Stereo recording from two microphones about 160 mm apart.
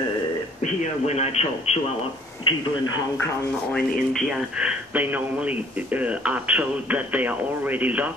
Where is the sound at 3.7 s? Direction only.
5° left (ahead or behind).